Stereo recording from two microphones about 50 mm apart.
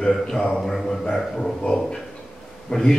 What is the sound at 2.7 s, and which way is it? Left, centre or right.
Speech, centre.